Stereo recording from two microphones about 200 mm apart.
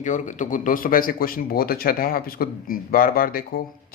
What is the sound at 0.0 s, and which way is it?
Speech, 40° left (ahead or behind).